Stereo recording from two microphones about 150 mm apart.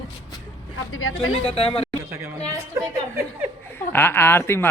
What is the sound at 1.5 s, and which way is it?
Speech, 40° left (ahead or behind).